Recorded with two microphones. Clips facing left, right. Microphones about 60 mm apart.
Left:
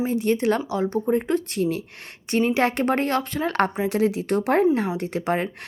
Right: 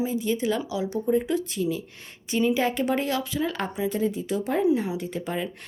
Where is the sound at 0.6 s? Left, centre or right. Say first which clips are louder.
Left 4 dB; left.